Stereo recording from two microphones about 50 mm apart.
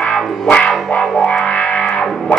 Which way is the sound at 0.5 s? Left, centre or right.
Centre.